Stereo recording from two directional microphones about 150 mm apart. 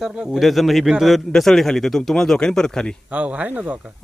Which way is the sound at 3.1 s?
10° right (ahead or behind).